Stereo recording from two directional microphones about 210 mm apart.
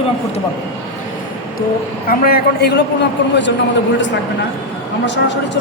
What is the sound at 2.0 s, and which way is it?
Speech, 45° left (ahead or behind).